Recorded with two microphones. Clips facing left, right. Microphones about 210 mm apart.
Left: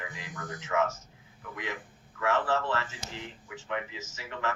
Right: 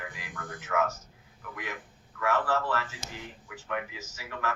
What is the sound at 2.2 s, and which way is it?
Speech, 25° left (ahead or behind).